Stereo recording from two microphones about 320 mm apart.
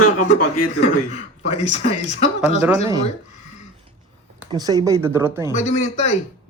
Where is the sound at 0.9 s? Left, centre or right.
Left.